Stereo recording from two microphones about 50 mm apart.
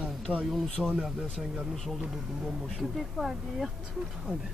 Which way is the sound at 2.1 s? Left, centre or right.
Centre.